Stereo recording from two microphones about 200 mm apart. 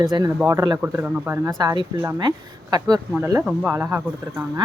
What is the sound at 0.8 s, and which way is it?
Speech, 10° right (ahead or behind).